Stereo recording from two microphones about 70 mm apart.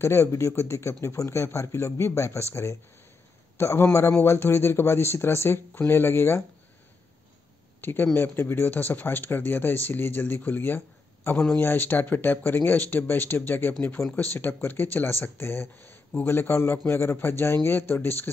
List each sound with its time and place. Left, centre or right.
0.0 s a man's voice: left
7.8 s a man's voice: left
14.0 s a man's voice: left
14.3 s a man's voice: left